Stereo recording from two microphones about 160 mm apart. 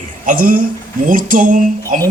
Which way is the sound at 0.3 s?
60° right (ahead or behind).